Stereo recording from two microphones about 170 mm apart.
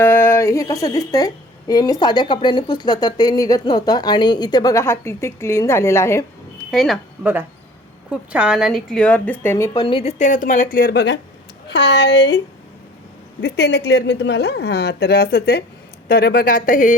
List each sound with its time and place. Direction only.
0.0 s speech: 10° left (ahead or behind)
6.7 s a woman's voice: centre (ahead or behind); by 9.8 s 15° left (ahead or behind)
9.8 s speech: 35° left (ahead or behind); by 12.4 s 90° left
13.4 s speech: 75° left (ahead or behind); by 16.9 s 55° left (ahead or behind)